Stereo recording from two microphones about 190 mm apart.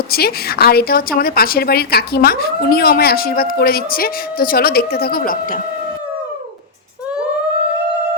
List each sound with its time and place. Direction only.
0.1 s a woman's voice: 55° left (ahead or behind)